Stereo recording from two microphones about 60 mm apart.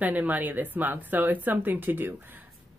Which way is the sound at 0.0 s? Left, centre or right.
Right.